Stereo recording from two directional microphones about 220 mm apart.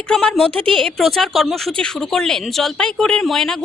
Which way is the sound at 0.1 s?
5° left (ahead or behind).